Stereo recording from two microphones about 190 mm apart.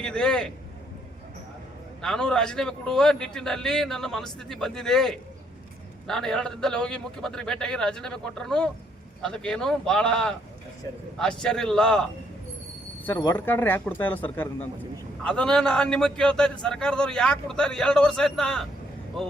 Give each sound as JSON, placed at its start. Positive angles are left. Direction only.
{"t": 0.0, "sound": "a man's voice", "side_deg": 5}
{"t": 2.0, "sound": "a man's voice", "side_deg": 5}
{"t": 13.1, "sound": "a man's voice", "side_deg": 10}